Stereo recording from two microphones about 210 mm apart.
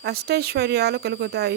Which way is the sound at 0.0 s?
50° right (ahead or behind).